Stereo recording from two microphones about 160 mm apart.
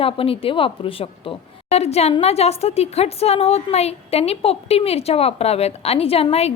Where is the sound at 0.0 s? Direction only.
35° left (ahead or behind).